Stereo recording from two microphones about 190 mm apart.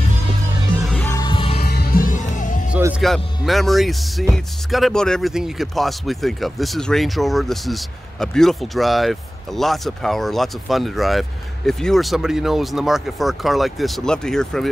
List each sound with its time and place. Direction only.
0.8 s music: 10° left (ahead or behind)
1.2 s music: 25° left (ahead or behind)
1.6 s music: 55° left (ahead or behind)
3.0 s speech: centre (ahead or behind)